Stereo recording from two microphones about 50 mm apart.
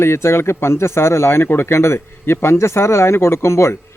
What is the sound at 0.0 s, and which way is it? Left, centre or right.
Speech, left.